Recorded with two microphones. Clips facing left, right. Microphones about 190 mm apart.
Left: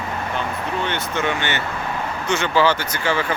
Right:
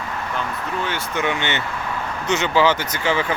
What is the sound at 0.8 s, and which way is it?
Speech, 10° right (ahead or behind).